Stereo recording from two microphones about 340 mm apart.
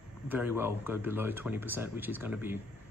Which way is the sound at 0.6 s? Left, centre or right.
Centre.